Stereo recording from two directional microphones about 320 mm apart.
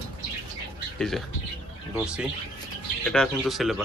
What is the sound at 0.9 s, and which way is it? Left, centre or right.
Speech, centre.